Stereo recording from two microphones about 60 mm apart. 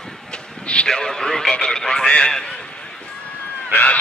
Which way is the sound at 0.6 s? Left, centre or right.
Centre.